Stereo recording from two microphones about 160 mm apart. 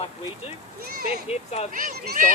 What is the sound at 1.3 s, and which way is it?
Speech, 40° left (ahead or behind).